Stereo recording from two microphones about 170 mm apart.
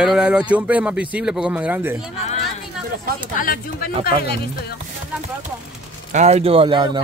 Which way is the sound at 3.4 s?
60° left (ahead or behind).